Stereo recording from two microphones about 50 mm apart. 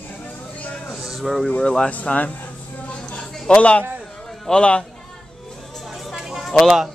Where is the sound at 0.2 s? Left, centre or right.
Left.